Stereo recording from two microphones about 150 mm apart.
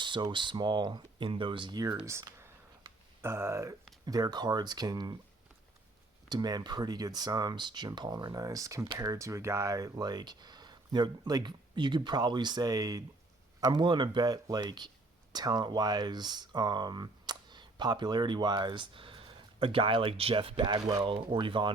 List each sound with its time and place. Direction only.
0.0 s speech: 30° right (ahead or behind)
2.0 s a sound: 20° right (ahead or behind)
4.0 s speech: 25° right (ahead or behind)
6.2 s speech: 25° right (ahead or behind)